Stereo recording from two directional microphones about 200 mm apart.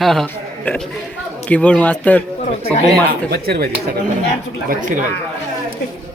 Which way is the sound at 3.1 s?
50° right (ahead or behind).